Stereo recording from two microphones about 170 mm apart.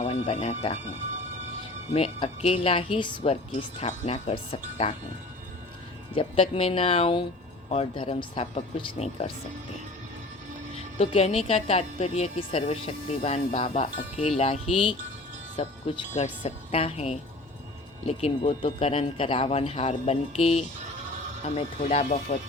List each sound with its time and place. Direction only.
0.0 s speech: 35° left (ahead or behind)
1.9 s speech: 35° left (ahead or behind)
6.1 s speech: 30° left (ahead or behind)
10.9 s speech: 35° left (ahead or behind)